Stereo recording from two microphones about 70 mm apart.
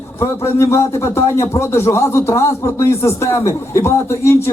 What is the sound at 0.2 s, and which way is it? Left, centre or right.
A man's voice, left.